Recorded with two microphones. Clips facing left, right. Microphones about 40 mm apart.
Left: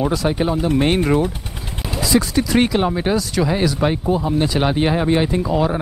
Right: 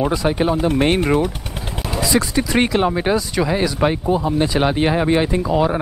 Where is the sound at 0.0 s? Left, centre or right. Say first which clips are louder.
Right 1 dB; centre.